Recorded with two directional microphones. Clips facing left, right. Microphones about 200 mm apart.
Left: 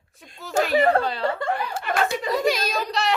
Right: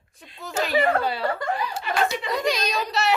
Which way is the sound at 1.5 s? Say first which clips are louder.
Left 1 dB; 55° left (ahead or behind).